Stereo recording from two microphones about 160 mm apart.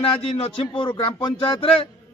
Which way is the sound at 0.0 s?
35° left (ahead or behind).